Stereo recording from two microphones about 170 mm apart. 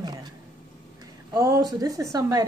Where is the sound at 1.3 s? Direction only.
20° right (ahead or behind).